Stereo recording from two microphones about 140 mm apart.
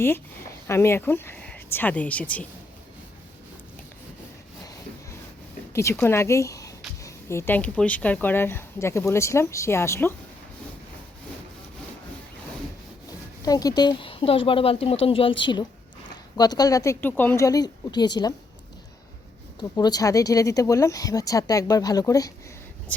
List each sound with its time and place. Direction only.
0.7 s speech: 20° left (ahead or behind)
5.7 s speech: 20° left (ahead or behind)
13.4 s speech: 25° left (ahead or behind)
19.5 s speech: 30° left (ahead or behind)